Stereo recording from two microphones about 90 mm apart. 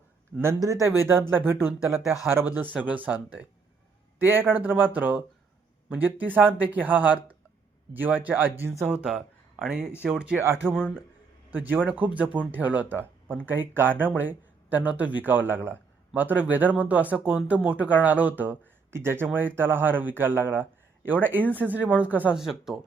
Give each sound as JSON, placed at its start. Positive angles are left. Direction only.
{"t": 0.6, "sound": "speech", "side_deg": -40}
{"t": 0.9, "sound": "speech", "side_deg": -25}
{"t": 2.7, "sound": "speech", "side_deg": -15}
{"t": 8.9, "sound": "speech", "side_deg": -10}
{"t": 10.4, "sound": "speech", "side_deg": -30}
{"t": 10.7, "sound": "a man's voice", "side_deg": 10}
{"t": 11.5, "sound": "speech", "side_deg": -20}
{"t": 22.4, "sound": "speech", "side_deg": -5}